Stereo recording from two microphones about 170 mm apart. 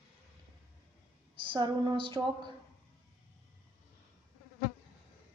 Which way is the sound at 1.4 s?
30° right (ahead or behind).